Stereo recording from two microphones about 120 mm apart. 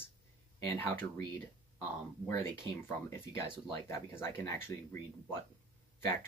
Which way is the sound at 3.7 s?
25° left (ahead or behind).